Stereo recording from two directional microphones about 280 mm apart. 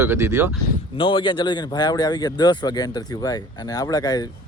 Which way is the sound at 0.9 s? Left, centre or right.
Centre.